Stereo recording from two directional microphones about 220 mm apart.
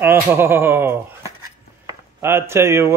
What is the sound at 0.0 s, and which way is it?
Speech, 10° right (ahead or behind).